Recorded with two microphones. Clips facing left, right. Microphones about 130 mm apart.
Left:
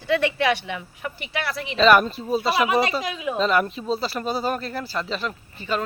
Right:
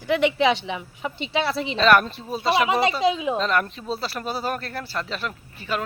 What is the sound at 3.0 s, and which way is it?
Speech, 25° right (ahead or behind).